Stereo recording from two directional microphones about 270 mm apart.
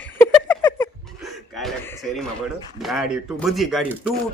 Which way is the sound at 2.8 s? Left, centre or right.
Centre.